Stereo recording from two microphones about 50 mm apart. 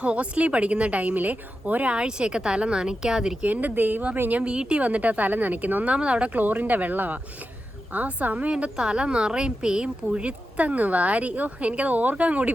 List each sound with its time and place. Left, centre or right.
0.0 s speech: right
3.4 s speech: right